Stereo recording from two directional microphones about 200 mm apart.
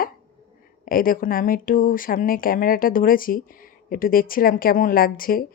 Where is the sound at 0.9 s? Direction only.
45° left (ahead or behind).